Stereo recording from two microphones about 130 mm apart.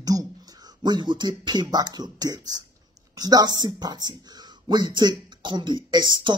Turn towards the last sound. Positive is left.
turn(degrees=-35)  # may be behind; listen again after turning